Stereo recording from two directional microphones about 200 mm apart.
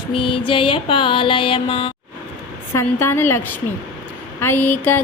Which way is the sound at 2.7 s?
15° left (ahead or behind).